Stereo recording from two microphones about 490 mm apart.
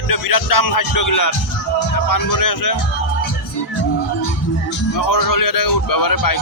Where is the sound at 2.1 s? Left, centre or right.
Left.